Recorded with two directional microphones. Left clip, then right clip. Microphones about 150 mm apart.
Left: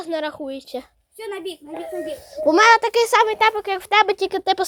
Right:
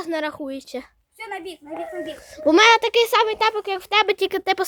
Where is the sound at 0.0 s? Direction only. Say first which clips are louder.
Even; 20° right (ahead or behind).